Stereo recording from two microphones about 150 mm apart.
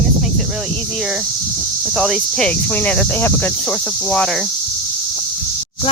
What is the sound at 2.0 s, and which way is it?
Speech, centre (ahead or behind).